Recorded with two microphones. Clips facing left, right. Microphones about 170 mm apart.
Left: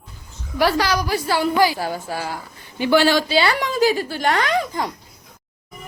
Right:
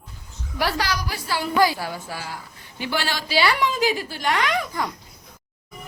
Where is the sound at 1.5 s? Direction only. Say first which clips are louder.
Right 1 dB; 15° left (ahead or behind).